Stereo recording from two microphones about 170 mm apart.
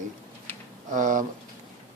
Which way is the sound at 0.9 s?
50° right (ahead or behind).